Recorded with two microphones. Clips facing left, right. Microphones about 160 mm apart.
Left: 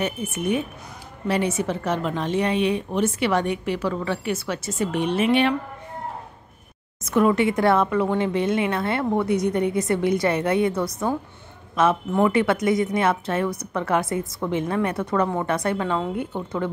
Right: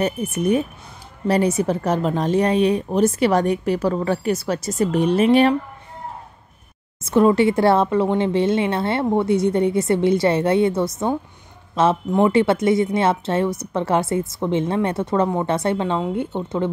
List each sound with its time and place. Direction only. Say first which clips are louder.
0.0 s a woman's voice: right 5 dB; 40° right (ahead or behind)
7.0 s a woman's voice: right 4 dB; 30° right (ahead or behind)